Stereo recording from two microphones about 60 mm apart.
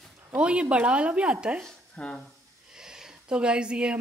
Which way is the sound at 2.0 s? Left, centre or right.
Centre.